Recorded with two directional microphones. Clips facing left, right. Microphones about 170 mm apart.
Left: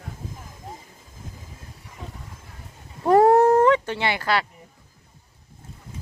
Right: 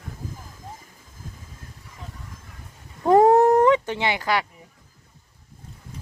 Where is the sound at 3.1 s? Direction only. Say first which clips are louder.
Even; 20° right (ahead or behind).